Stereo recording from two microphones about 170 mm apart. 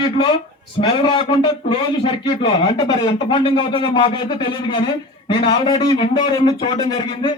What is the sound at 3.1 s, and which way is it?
Speech, 30° left (ahead or behind).